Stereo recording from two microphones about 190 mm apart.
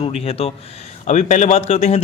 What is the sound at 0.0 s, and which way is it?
A man's voice, 30° left (ahead or behind).